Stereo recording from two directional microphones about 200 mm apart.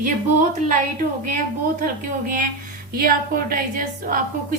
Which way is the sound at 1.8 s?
45° right (ahead or behind).